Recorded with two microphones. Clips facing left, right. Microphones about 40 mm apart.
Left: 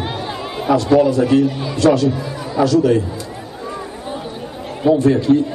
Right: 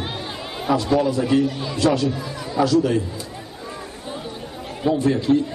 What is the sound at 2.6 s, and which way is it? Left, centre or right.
Speech, centre.